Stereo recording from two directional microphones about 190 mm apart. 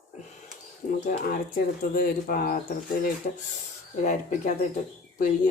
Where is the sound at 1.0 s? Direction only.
45° left (ahead or behind).